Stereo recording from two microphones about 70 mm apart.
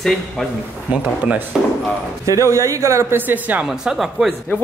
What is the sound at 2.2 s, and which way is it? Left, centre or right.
Speech, right.